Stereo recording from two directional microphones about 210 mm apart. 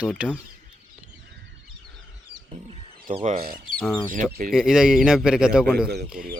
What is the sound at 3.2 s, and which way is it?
Speech, 45° right (ahead or behind).